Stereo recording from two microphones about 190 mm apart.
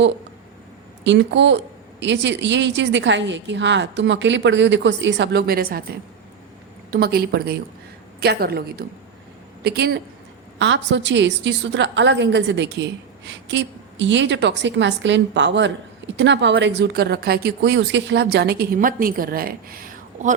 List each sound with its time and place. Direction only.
1.0 s a woman's voice: 70° right (ahead or behind); by 5.8 s 50° right (ahead or behind)
6.9 s speech: 55° right (ahead or behind)
10.6 s a woman's voice: 70° right (ahead or behind); by 20.3 s 45° right (ahead or behind)